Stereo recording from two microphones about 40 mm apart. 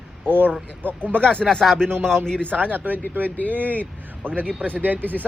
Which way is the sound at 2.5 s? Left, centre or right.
Right.